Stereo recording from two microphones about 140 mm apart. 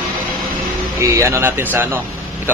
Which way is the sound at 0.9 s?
20° right (ahead or behind).